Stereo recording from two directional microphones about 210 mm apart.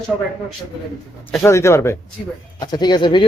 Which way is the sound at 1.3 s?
10° left (ahead or behind).